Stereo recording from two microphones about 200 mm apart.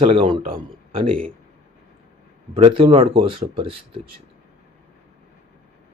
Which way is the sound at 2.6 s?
25° right (ahead or behind).